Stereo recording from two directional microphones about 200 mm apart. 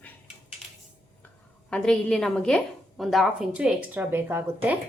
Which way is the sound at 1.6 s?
5° left (ahead or behind).